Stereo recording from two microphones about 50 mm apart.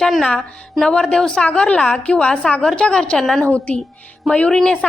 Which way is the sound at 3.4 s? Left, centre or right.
Left.